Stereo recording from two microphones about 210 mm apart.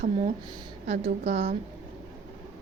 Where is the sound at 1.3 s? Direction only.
35° right (ahead or behind).